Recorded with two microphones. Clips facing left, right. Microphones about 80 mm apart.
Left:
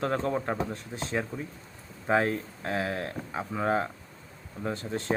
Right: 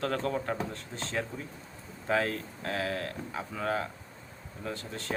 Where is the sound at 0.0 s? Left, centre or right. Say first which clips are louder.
Left 3 dB; left.